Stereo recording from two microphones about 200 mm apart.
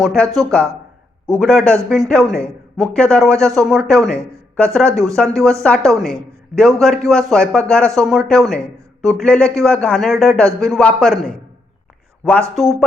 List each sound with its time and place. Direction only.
0.0 s a man's voice: centre (ahead or behind)
1.4 s a man's voice: 5° left (ahead or behind)